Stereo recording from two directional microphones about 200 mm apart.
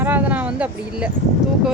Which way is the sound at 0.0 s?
10° right (ahead or behind).